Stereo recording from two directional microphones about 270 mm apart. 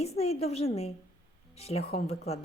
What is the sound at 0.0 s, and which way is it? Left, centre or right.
A woman's voice, left.